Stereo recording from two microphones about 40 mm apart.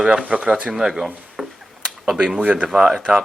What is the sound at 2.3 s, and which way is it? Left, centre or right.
Speech, right.